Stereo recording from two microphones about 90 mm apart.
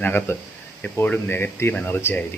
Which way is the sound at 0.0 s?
25° left (ahead or behind).